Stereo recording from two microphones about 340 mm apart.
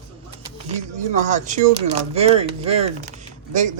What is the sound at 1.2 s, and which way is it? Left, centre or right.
A woman's voice, right.